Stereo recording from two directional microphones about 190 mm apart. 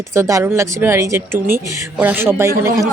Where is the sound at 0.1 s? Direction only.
15° right (ahead or behind).